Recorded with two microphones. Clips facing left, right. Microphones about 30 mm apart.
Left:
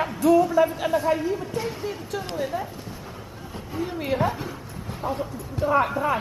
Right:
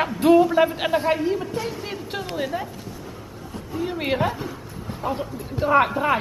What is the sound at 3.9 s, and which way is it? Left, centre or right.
Speech, right.